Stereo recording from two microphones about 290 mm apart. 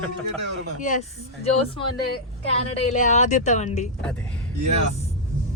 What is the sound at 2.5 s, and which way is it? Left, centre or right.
Speech, left.